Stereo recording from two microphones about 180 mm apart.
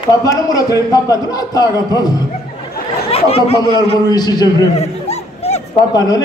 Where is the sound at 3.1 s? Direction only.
35° left (ahead or behind).